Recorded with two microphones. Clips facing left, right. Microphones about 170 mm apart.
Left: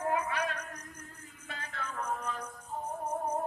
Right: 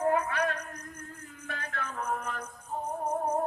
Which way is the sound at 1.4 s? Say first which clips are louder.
Right 4 dB; 65° right (ahead or behind).